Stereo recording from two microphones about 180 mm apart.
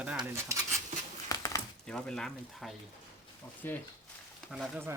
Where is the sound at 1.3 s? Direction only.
20° left (ahead or behind).